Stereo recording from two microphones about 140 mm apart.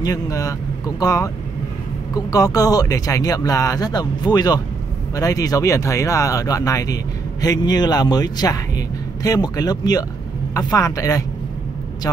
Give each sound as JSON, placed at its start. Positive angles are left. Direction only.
{"t": 0.0, "sound": "speech", "side_deg": 25}